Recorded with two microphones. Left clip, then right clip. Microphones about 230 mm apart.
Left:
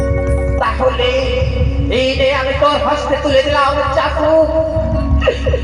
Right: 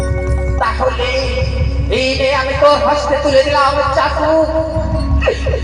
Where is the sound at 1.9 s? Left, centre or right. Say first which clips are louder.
Even; left.